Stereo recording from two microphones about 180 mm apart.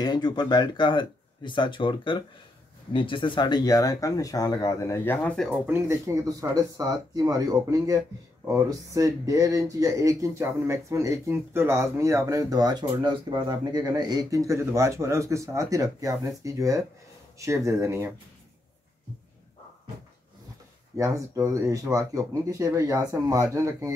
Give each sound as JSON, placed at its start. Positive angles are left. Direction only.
{"t": 0.0, "sound": "speech", "side_deg": 25}
{"t": 5.5, "sound": "speech", "side_deg": -10}
{"t": 20.9, "sound": "speech", "side_deg": -15}